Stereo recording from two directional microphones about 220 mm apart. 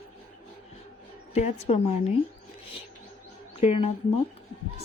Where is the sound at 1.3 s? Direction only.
30° left (ahead or behind).